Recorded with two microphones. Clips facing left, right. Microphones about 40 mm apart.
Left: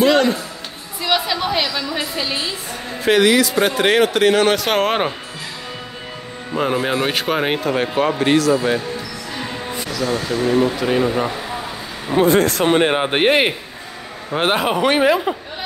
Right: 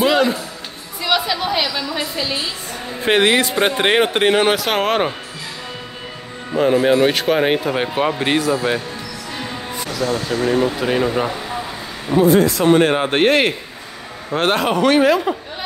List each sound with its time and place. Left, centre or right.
0.0 s music: centre
1.0 s a woman's voice: centre
3.0 s a man's voice: right
4.6 s speech: centre
6.5 s speech: centre
10.0 s speech: centre
12.2 s speech: left
12.6 s speech: centre